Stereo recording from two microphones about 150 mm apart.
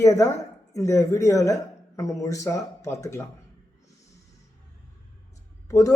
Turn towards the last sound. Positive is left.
turn(degrees=20)  # may be behind; listen again after turning